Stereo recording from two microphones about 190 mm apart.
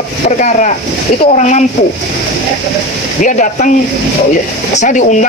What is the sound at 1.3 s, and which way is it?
Speech, 35° left (ahead or behind).